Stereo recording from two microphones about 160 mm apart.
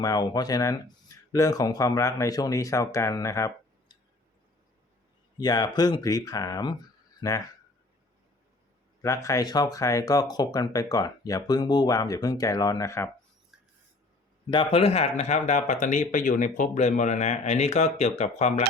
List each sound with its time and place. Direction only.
0.0 s speech: 25° left (ahead or behind)
5.4 s speech: 25° left (ahead or behind)
9.0 s speech: 20° left (ahead or behind)
14.5 s speech: 35° left (ahead or behind)